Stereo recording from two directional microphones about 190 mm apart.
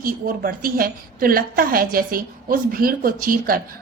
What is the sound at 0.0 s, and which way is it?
A woman's voice, 50° right (ahead or behind).